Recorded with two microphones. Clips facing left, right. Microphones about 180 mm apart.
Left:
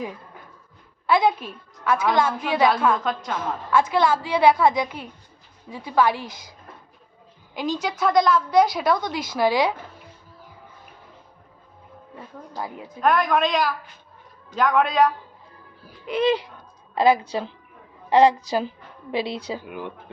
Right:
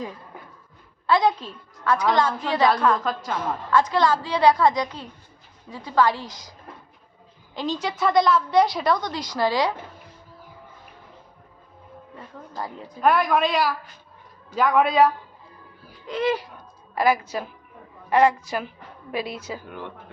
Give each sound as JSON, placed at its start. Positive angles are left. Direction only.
{"t": 1.0, "sound": "a woman's voice", "side_deg": 10}
{"t": 7.5, "sound": "a woman's voice", "side_deg": 5}
{"t": 12.1, "sound": "a woman's voice", "side_deg": 5}
{"t": 16.0, "sound": "a woman's voice", "side_deg": 15}
{"t": 16.9, "sound": "a woman's voice", "side_deg": 25}
{"t": 19.6, "sound": "a woman's voice", "side_deg": 10}